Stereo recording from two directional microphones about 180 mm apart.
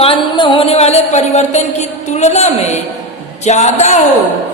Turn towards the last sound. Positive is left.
turn(degrees=40)  # may be behind; listen again after turning